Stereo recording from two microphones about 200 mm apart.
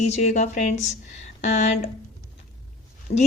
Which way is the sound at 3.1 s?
30° left (ahead or behind).